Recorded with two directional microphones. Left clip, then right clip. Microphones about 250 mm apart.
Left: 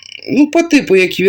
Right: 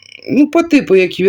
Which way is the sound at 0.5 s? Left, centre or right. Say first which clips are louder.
Even; centre.